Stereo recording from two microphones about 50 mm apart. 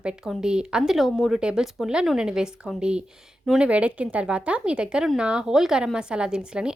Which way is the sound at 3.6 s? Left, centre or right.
Right.